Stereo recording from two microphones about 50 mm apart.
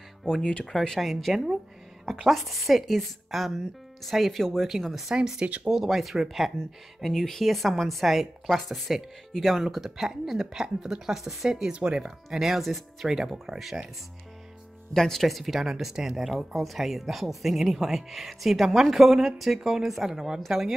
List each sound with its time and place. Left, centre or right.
0.4 s speech: left
0.7 s speech: centre
5.1 s speech: centre
5.7 s speech: centre
15.0 s speech: centre